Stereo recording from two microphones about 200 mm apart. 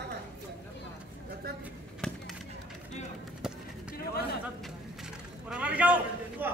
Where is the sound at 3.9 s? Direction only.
50° left (ahead or behind).